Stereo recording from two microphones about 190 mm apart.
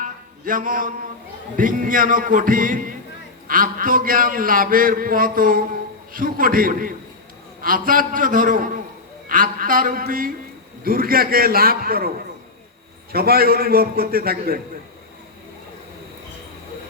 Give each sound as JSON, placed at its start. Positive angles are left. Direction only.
{"t": 0.0, "sound": "mantra", "side_deg": -45}
{"t": 1.5, "sound": "a man's voice", "side_deg": -45}
{"t": 13.1, "sound": "a man's voice", "side_deg": -55}